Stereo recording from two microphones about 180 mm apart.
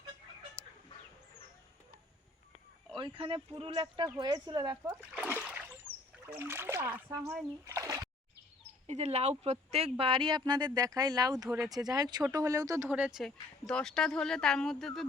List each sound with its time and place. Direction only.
2.9 s speech: 30° right (ahead or behind)
5.1 s splash: 5° right (ahead or behind)
6.2 s speech: 10° right (ahead or behind)
8.9 s speech: 40° right (ahead or behind); by 11.4 s 20° right (ahead or behind)
11.4 s speech: centre (ahead or behind)
11.7 s speech: 20° right (ahead or behind); by 15.0 s centre (ahead or behind)